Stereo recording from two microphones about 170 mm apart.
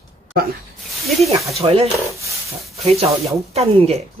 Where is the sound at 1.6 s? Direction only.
35° right (ahead or behind).